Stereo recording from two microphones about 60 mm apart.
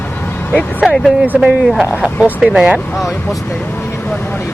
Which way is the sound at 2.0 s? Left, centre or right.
Centre.